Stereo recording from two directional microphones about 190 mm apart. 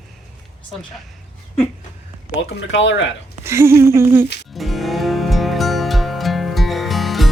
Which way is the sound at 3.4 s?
15° right (ahead or behind).